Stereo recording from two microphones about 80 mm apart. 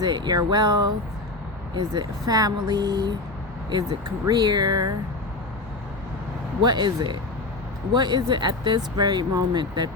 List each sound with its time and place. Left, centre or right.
0.0 s speech: right
3.7 s speech: right
6.6 s speech: right